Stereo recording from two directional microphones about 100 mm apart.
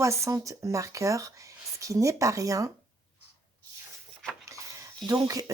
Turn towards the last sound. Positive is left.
turn(degrees=-35)  # may be behind; listen again after turning